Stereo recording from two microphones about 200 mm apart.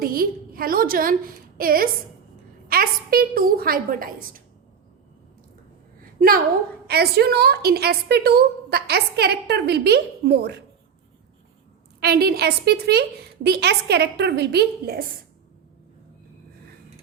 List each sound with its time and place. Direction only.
0.0 s a woman's voice: 50° right (ahead or behind)
6.0 s a sound: 45° right (ahead or behind)
6.8 s a woman's voice: 50° right (ahead or behind)
11.9 s a woman's voice: 50° right (ahead or behind)